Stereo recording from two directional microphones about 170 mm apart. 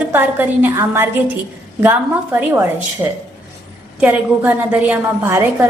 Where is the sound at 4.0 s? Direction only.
10° right (ahead or behind).